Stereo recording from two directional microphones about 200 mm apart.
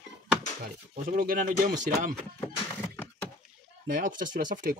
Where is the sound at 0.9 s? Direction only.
40° right (ahead or behind).